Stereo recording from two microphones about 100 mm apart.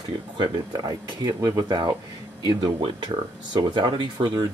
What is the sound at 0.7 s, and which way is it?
Speech, 40° right (ahead or behind).